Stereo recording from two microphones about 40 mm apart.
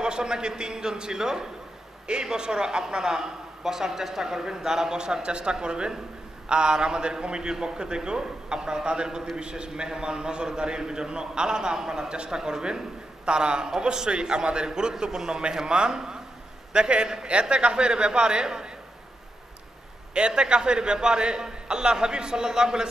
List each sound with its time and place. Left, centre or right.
0.0 s a man's voice: centre
20.2 s a man's voice: right